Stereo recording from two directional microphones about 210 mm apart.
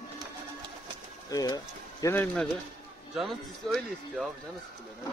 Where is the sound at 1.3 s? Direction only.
15° left (ahead or behind).